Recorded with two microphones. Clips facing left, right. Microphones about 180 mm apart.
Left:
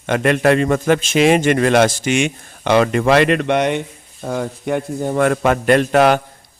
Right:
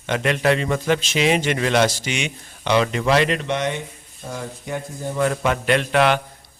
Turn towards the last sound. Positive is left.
turn(degrees=45)  # may be behind; listen again after turning